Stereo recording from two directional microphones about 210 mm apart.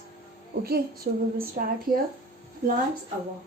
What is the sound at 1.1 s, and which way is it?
Speech, 45° right (ahead or behind).